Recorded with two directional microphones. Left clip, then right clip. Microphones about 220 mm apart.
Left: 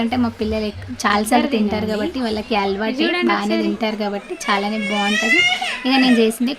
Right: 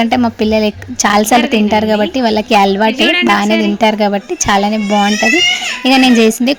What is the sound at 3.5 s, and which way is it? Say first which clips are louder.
Speech: right 7 dB; centre (ahead or behind).